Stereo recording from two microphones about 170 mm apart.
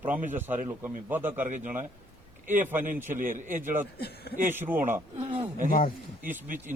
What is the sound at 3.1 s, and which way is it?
Speech, 50° right (ahead or behind).